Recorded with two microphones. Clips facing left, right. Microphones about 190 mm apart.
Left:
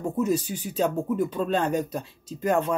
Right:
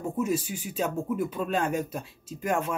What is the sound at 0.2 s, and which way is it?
Speech, 10° right (ahead or behind).